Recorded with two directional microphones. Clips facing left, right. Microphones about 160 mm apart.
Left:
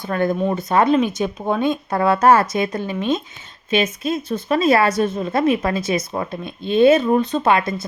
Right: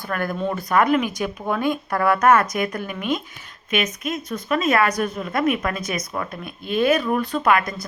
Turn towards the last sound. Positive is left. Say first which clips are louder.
# left 2 dB
turn(degrees=25)  # may be behind; listen again after turning